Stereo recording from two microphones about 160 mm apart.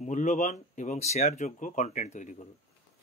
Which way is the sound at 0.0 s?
50° left (ahead or behind).